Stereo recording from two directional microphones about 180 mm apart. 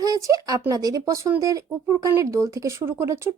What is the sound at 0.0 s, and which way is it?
Speech, 20° right (ahead or behind).